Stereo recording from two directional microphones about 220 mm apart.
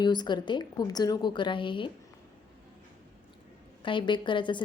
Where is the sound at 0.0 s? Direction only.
20° left (ahead or behind).